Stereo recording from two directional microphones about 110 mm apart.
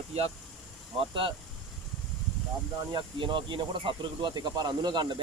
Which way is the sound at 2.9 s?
45° right (ahead or behind).